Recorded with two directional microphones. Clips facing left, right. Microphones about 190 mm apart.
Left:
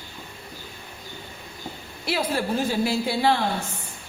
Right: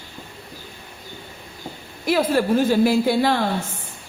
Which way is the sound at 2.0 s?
50° right (ahead or behind).